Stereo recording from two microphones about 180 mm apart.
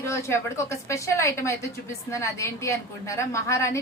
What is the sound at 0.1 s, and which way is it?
A woman's voice, 15° left (ahead or behind).